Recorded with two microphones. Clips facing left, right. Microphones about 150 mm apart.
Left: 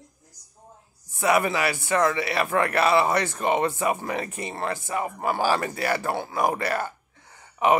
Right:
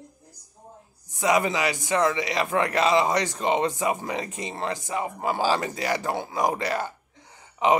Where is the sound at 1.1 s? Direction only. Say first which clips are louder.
Left 1 dB; 15° right (ahead or behind).